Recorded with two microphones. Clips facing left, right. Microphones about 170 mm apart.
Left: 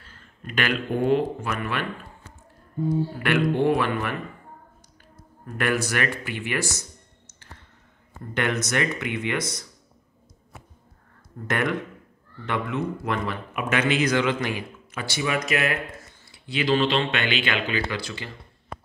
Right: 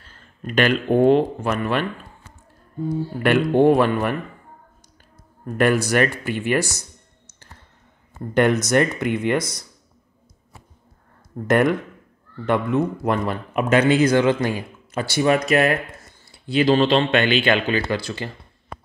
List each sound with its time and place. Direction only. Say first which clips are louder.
0.8 s speech: right 10 dB; 65° right (ahead or behind)
1.1 s speech: right 4 dB; 35° right (ahead or behind)
3.2 s speech: right 8 dB; 45° right (ahead or behind)
5.6 s speech: right 7 dB; 40° right (ahead or behind)
8.4 s speech: right 8 dB; 40° right (ahead or behind)
11.4 s speech: right 8 dB; 45° right (ahead or behind)